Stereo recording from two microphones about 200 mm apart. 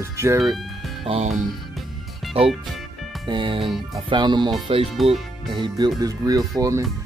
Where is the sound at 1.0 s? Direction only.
30° right (ahead or behind).